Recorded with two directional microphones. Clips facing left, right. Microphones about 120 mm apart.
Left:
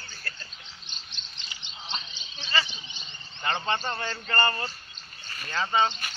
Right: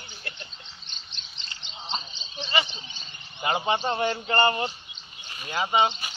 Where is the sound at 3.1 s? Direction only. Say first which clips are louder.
Right 4 dB; 10° right (ahead or behind).